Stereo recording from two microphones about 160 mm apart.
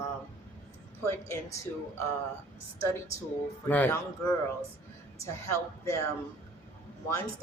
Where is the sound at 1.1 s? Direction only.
15° left (ahead or behind).